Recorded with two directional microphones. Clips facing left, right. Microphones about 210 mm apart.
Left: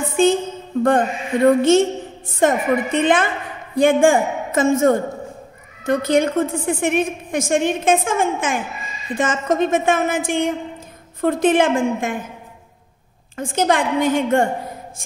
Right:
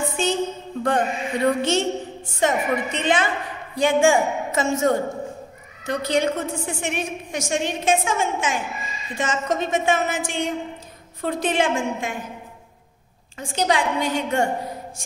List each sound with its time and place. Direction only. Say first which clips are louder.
0.8 s a woman's voice: left 4 dB; 50° left (ahead or behind)
13.4 s a woman's voice: left 4 dB; 50° left (ahead or behind)